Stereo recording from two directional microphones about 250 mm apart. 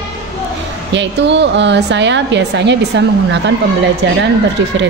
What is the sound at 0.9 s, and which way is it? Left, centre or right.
A woman's voice, right.